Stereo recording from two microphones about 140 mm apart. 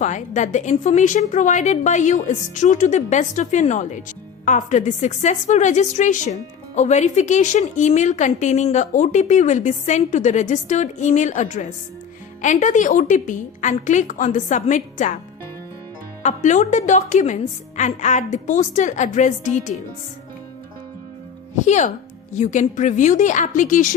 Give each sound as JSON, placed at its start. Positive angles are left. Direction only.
{"t": 0.0, "sound": "a woman's voice", "side_deg": 60}
{"t": 16.2, "sound": "a woman's voice", "side_deg": 60}
{"t": 21.5, "sound": "a woman's voice", "side_deg": 55}